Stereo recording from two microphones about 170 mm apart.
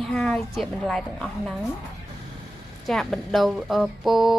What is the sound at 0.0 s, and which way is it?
Speech, 5° left (ahead or behind).